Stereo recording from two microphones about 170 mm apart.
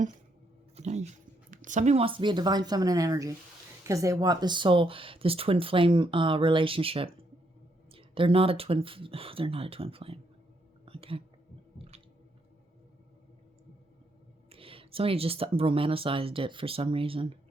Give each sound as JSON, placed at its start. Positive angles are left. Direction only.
{"t": 0.8, "sound": "speech", "side_deg": -40}
{"t": 10.8, "sound": "whispering", "side_deg": -35}
{"t": 14.5, "sound": "speech", "side_deg": -30}